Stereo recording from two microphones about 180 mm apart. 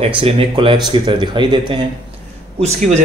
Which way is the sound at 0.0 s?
30° right (ahead or behind).